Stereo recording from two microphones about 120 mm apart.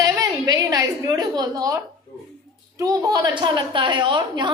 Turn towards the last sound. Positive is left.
turn(degrees=-40)  # may be behind; listen again after turning